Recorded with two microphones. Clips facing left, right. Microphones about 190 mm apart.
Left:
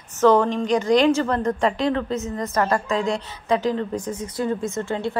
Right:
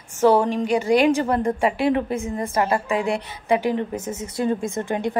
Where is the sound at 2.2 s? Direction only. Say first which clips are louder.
Right 1 dB; 30° right (ahead or behind).